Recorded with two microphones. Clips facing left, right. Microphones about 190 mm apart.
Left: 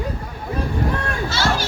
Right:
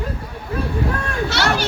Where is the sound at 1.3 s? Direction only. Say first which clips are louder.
Right 1 dB; 65° right (ahead or behind).